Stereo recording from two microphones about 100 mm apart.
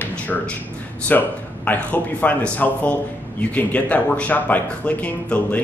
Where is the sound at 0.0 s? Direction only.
15° left (ahead or behind).